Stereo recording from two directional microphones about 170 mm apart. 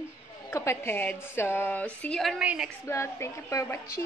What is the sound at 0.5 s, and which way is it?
A woman's voice, 15° left (ahead or behind).